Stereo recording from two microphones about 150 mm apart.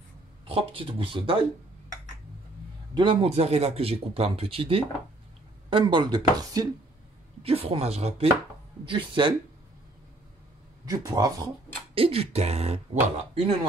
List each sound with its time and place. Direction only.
0.5 s speech: 40° right (ahead or behind)
2.9 s speech: 35° right (ahead or behind)
7.4 s speech: 40° right (ahead or behind)
8.8 s speech: 35° right (ahead or behind)
10.9 s speech: 25° right (ahead or behind)
11.9 s speech: 40° right (ahead or behind)